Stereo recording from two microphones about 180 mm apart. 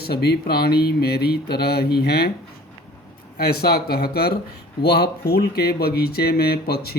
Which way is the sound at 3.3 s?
60° left (ahead or behind).